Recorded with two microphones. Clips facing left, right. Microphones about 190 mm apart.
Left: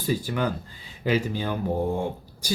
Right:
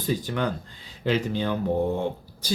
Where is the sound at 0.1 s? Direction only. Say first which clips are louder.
Left 1 dB; 10° left (ahead or behind).